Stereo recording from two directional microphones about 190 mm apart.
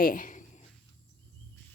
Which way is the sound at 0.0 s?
45° left (ahead or behind).